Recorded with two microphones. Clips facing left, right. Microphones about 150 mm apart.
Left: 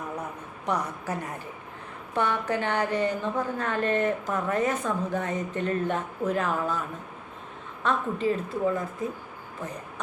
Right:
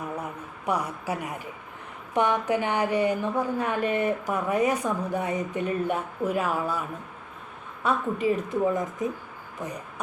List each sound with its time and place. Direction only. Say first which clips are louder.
0.6 s a woman's voice: right 1 dB; 10° right (ahead or behind)
7.9 s a woman's voice: right 1 dB; 15° right (ahead or behind)